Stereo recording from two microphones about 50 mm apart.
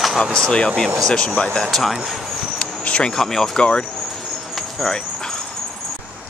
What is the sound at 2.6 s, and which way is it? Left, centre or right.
Insect, left.